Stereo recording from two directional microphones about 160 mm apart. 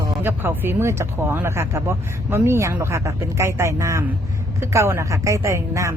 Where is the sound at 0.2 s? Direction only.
15° right (ahead or behind).